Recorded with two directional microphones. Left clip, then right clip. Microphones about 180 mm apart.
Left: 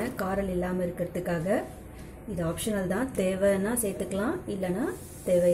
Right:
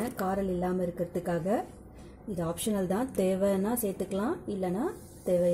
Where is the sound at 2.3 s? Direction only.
35° right (ahead or behind).